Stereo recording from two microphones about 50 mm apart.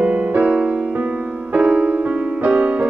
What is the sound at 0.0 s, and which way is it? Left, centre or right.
Music, right.